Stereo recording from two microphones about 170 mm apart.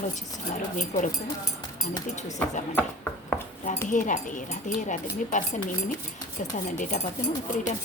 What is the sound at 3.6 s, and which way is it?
Speech, 50° left (ahead or behind).